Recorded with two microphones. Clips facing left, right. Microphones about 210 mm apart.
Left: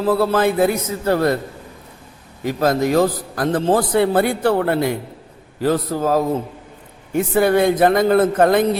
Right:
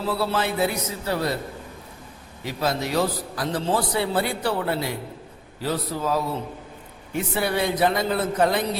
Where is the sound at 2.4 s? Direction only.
50° left (ahead or behind).